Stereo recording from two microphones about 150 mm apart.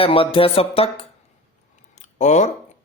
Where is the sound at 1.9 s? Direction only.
50° left (ahead or behind).